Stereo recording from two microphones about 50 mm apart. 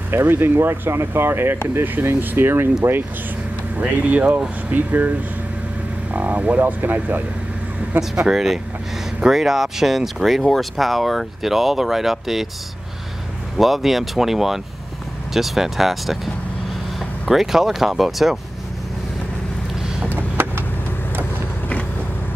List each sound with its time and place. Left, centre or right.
0.1 s speech: right
3.7 s speech: right
6.1 s speech: right
8.0 s speech: centre
13.6 s speech: centre
20.1 s a sound: right